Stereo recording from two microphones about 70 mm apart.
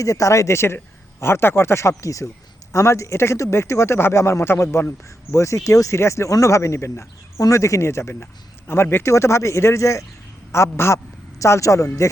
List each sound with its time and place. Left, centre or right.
0.0 s speech: left